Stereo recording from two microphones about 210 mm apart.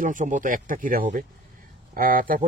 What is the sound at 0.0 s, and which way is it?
Speech, 40° right (ahead or behind).